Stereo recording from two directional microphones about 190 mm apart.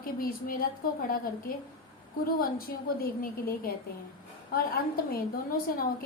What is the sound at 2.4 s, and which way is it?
A woman's voice, 50° left (ahead or behind).